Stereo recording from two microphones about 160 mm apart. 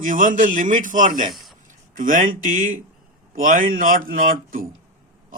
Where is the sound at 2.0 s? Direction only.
55° right (ahead or behind).